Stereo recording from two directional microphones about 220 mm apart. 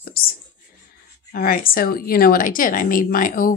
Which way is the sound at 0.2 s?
40° left (ahead or behind).